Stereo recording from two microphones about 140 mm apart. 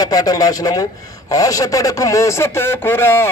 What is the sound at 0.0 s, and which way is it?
A man's voice, 30° left (ahead or behind).